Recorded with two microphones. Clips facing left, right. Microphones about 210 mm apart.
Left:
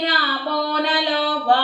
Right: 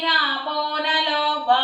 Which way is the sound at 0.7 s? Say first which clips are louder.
Left 4 dB; 40° left (ahead or behind).